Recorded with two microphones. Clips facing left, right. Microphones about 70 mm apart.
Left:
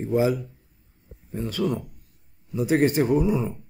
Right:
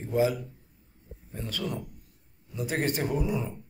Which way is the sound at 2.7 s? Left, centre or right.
Centre.